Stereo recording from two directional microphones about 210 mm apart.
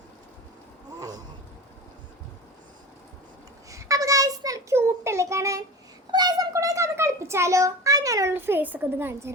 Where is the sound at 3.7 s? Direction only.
15° right (ahead or behind).